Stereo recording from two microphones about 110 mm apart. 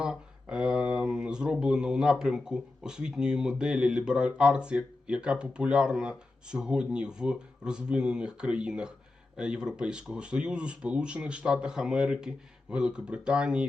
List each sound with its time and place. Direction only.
0.0 s speech: 5° right (ahead or behind)